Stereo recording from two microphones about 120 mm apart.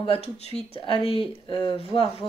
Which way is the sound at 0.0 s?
55° left (ahead or behind).